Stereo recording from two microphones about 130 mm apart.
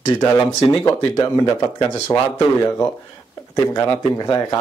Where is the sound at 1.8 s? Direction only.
40° left (ahead or behind).